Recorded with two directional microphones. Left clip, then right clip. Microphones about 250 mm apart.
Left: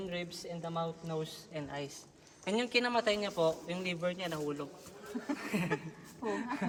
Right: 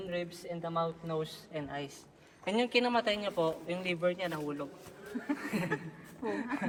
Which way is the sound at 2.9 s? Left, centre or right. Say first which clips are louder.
Right 1 dB; centre.